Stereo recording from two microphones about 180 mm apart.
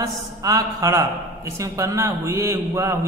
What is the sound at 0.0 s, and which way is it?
A man's voice, 20° right (ahead or behind).